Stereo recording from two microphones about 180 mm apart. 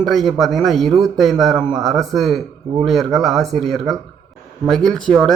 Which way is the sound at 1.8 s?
Centre (ahead or behind).